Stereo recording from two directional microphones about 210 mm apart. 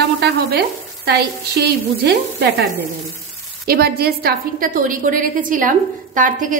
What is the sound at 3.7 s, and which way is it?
A woman's voice, 45° right (ahead or behind).